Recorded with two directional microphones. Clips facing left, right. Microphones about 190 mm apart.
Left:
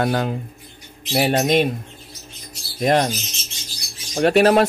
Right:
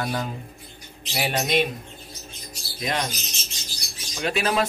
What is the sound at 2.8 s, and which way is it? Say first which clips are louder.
Speech: left 10 dB; 55° left (ahead or behind).